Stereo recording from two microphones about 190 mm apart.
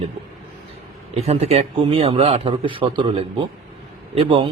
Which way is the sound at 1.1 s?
35° right (ahead or behind).